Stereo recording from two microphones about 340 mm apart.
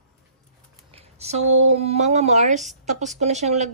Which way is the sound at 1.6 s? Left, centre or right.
Centre.